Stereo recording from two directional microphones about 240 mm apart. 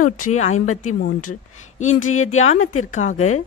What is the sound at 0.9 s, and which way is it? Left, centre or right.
Speech, left.